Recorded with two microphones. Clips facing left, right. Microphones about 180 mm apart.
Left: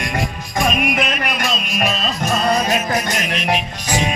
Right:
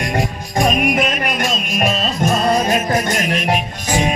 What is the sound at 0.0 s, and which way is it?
Music, 40° right (ahead or behind).